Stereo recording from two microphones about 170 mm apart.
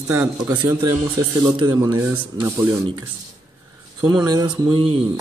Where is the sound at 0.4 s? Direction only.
10° right (ahead or behind).